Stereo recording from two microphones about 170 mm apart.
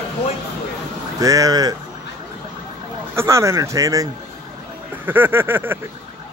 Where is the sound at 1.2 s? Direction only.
20° right (ahead or behind).